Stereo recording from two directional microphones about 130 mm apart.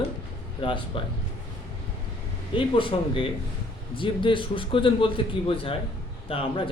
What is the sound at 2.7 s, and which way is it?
A man's voice, 40° left (ahead or behind).